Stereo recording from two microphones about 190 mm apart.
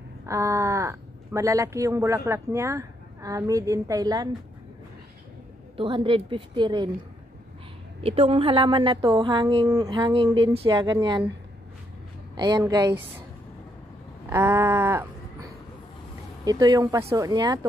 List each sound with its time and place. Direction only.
0.3 s speech: 15° right (ahead or behind)
5.8 s speech: 25° right (ahead or behind)
8.0 s speech: 30° right (ahead or behind)
12.4 s speech: 20° right (ahead or behind)
14.3 s a sound: 15° right (ahead or behind)
16.4 s speech: 20° right (ahead or behind)